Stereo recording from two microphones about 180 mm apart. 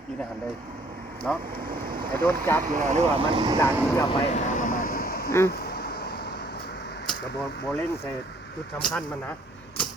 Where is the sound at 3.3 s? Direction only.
25° right (ahead or behind).